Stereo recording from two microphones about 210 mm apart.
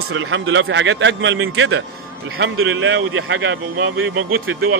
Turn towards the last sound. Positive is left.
turn(degrees=-80)